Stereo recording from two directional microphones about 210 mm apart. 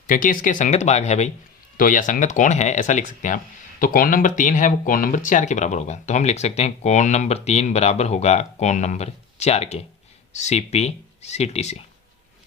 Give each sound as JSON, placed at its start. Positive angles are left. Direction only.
{"t": 0.1, "sound": "speech", "side_deg": 40}